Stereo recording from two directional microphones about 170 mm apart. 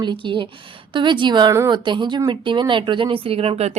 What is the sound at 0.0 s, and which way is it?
A woman's voice, 30° right (ahead or behind).